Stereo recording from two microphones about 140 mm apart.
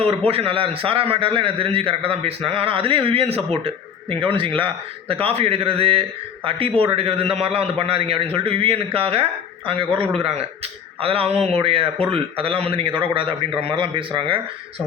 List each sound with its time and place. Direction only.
0.0 s a man's voice: 45° right (ahead or behind)
11.0 s a man's voice: 45° right (ahead or behind)